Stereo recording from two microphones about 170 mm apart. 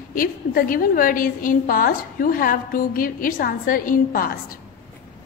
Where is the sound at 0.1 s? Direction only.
55° left (ahead or behind).